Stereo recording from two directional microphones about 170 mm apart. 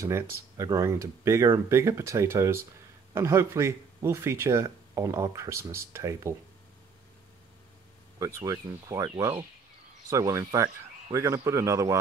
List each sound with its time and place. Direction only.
0.0 s speech: 15° right (ahead or behind)
8.2 s speech: 20° right (ahead or behind)